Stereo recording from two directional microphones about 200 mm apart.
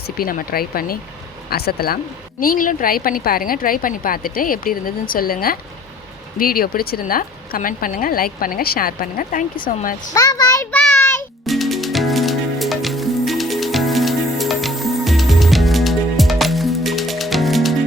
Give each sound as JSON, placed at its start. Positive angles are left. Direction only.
{"t": 0.2, "sound": "speech", "side_deg": 45}
{"t": 10.2, "sound": "child singing", "side_deg": 20}
{"t": 11.4, "sound": "music", "side_deg": 0}